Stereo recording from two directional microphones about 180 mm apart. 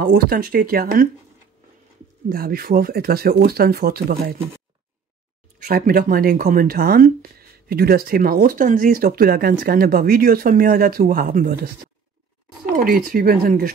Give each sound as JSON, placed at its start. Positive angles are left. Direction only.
{"t": 0.0, "sound": "speech", "side_deg": -55}
{"t": 2.2, "sound": "speech", "side_deg": -55}
{"t": 5.7, "sound": "speech", "side_deg": -60}